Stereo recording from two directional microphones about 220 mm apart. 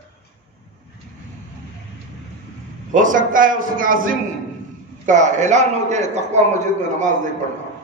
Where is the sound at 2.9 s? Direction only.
35° right (ahead or behind).